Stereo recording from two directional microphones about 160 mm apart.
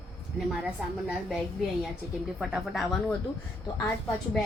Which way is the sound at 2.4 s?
Centre (ahead or behind).